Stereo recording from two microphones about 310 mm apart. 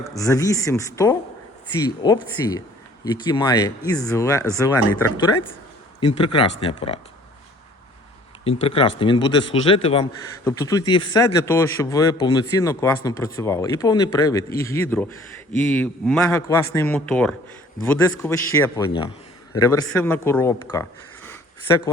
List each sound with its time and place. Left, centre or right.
0.0 s a man's voice: centre
6.0 s a man's voice: centre
8.6 s a man's voice: centre